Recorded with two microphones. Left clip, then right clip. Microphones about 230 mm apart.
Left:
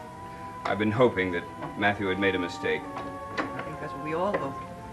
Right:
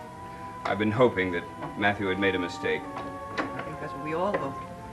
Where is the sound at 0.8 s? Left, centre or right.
Centre.